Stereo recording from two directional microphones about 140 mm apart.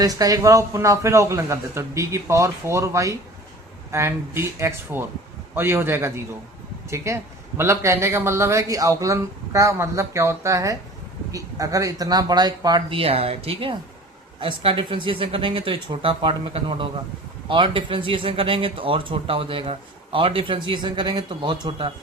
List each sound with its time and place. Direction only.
0.0 s a man's voice: 25° right (ahead or behind)